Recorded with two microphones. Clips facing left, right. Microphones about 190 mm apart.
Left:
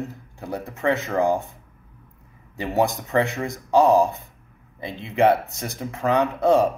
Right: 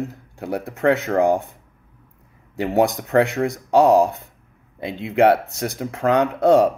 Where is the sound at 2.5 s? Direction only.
65° right (ahead or behind).